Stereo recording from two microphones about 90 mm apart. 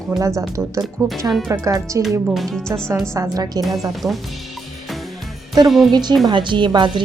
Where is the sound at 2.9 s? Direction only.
40° right (ahead or behind).